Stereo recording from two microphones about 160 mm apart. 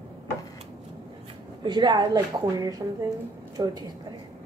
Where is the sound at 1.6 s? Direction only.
30° right (ahead or behind).